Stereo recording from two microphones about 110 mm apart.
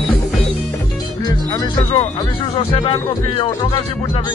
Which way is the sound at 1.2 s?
35° left (ahead or behind).